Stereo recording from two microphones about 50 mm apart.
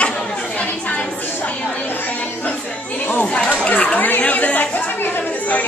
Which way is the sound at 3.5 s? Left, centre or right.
Left.